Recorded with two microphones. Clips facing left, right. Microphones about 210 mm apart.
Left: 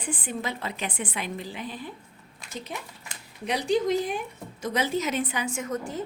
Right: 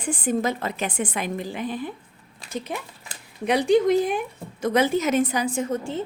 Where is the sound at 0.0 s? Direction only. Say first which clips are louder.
Right 8 dB; 45° right (ahead or behind).